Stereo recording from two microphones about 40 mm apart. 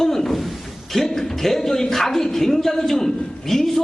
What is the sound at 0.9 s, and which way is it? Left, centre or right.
Speech, centre.